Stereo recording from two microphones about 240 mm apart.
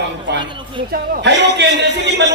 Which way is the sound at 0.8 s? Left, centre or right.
Right.